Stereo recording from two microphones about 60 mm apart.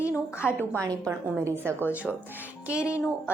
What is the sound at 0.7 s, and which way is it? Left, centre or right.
Speech, right.